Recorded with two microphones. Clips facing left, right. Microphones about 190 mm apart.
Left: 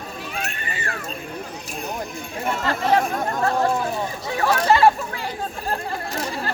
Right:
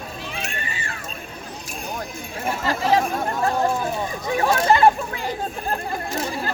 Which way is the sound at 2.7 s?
10° right (ahead or behind).